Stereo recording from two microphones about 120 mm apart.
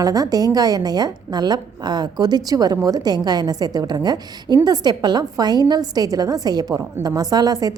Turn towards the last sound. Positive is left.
turn(degrees=-30)  # may be behind; listen again after turning